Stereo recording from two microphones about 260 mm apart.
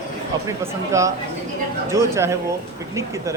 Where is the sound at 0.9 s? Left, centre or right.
Centre.